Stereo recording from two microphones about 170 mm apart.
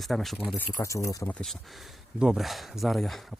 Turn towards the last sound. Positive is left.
turn(degrees=0)  # may be behind; listen again after turning